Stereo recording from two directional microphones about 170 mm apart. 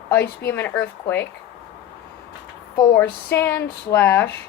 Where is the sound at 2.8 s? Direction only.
15° left (ahead or behind).